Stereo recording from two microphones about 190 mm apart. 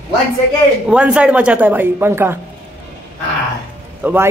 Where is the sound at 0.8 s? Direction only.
5° right (ahead or behind).